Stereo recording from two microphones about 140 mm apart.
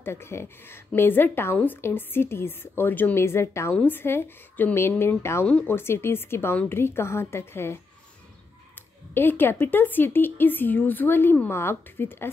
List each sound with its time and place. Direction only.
0.0 s speech: 15° left (ahead or behind)
9.1 s speech: 15° left (ahead or behind)